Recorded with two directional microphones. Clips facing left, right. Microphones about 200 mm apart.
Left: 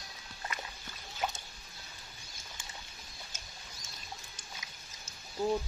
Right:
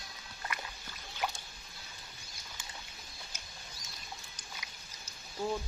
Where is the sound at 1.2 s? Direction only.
25° left (ahead or behind).